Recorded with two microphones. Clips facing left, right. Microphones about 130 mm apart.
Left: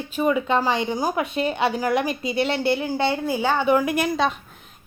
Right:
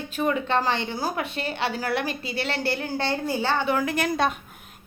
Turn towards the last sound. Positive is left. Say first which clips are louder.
# left 2 dB
turn(degrees=0)  # may be behind; listen again after turning